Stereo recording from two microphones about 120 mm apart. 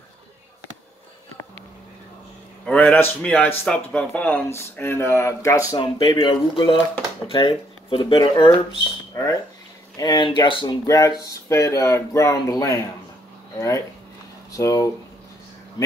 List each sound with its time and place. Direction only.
2.6 s a man's voice: 10° left (ahead or behind)
5.8 s speech: 50° left (ahead or behind)
9.1 s speech: 30° left (ahead or behind)
9.9 s speech: 40° left (ahead or behind)
10.9 s speech: 30° left (ahead or behind)